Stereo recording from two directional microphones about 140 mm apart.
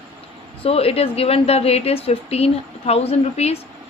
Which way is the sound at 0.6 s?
45° left (ahead or behind).